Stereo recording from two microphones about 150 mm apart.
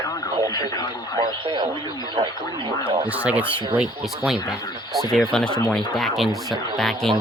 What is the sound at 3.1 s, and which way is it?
Speech, 10° right (ahead or behind).